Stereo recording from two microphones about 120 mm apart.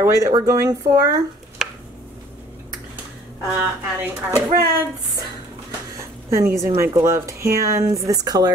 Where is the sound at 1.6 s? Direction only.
Centre (ahead or behind).